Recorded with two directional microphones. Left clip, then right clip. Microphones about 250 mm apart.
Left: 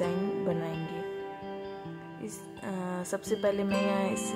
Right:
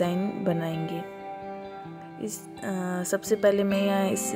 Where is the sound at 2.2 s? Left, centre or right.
Centre.